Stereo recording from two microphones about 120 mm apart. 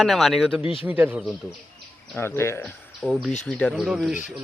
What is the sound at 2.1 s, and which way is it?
Speech, 20° left (ahead or behind).